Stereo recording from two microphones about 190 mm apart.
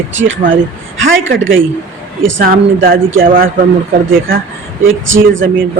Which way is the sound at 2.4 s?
50° right (ahead or behind).